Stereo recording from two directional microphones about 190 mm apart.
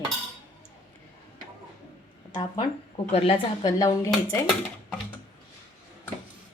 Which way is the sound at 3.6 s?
20° left (ahead or behind).